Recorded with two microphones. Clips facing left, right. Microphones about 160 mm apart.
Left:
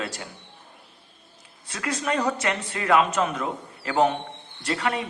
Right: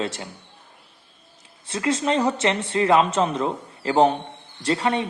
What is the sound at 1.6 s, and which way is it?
A man's voice, 25° right (ahead or behind).